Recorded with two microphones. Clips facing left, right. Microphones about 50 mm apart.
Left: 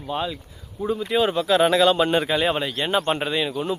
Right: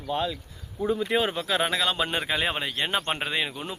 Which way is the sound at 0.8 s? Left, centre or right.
Centre.